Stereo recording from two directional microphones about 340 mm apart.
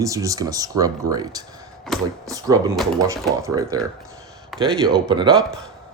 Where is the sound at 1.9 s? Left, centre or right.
Centre.